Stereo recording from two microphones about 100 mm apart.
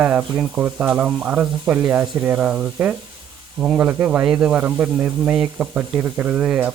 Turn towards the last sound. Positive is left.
turn(degrees=-10)  # may be behind; listen again after turning